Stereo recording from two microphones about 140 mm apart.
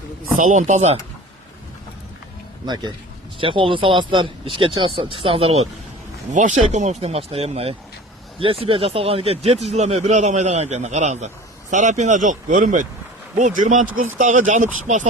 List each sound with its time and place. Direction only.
0.3 s speech: 65° right (ahead or behind)
2.6 s speech: 30° right (ahead or behind)
6.3 s a man's voice: 60° right (ahead or behind)